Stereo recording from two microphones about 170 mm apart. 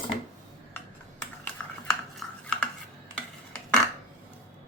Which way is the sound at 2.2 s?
5° left (ahead or behind).